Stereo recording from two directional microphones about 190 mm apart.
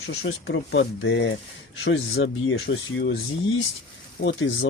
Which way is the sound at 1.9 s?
90° left.